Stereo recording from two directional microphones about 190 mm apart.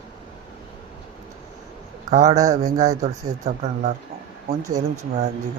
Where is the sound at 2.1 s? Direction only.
35° right (ahead or behind).